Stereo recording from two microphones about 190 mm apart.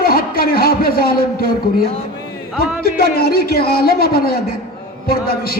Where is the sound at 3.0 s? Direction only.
55° left (ahead or behind).